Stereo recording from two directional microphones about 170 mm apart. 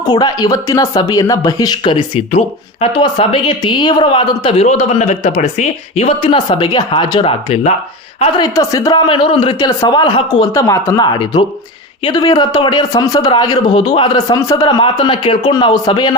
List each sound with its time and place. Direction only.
0.0 s speech: 25° left (ahead or behind)
8.4 s speech: 20° left (ahead or behind)
10.5 s speech: 15° left (ahead or behind)